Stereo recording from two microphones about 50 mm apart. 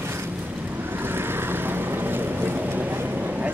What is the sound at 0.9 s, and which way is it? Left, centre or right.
Vehicle, right.